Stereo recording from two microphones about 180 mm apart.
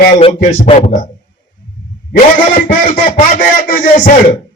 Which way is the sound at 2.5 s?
50° left (ahead or behind).